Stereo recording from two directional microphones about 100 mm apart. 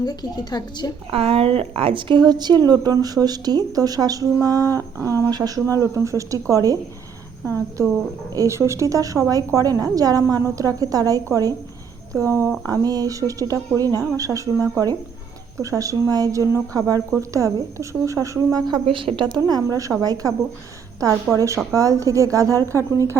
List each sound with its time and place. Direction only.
0.0 s a woman's voice: 45° left (ahead or behind)
1.1 s a woman's voice: 75° right (ahead or behind); by 18.6 s 30° right (ahead or behind)
18.7 s a woman's voice: 60° right (ahead or behind); by 22.9 s 30° right (ahead or behind)